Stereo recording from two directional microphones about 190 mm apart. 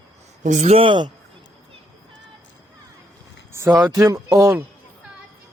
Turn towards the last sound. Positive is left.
turn(degrees=-15)  # may be behind; listen again after turning